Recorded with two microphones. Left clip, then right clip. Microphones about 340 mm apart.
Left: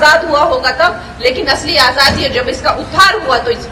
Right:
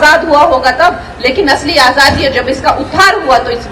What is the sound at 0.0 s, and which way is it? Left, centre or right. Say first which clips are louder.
A woman's voice: right 3 dB; right.